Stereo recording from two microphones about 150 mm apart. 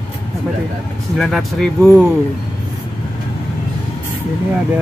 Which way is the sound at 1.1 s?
Centre (ahead or behind).